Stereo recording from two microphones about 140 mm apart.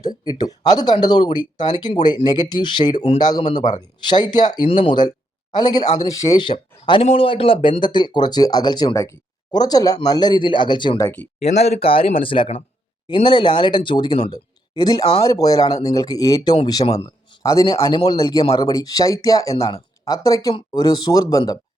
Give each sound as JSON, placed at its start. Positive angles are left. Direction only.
{"t": 0.3, "sound": "speech", "side_deg": 30}
{"t": 11.0, "sound": "speech", "side_deg": 15}
{"t": 11.4, "sound": "a man's voice", "side_deg": 50}
{"t": 19.5, "sound": "speech", "side_deg": 45}
{"t": 20.1, "sound": "speech", "side_deg": 25}